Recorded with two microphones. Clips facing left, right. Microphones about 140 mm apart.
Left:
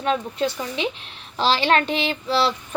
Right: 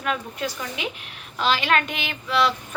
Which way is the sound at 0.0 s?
25° left (ahead or behind).